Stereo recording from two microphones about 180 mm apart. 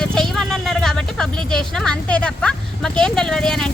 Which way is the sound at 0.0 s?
5° left (ahead or behind).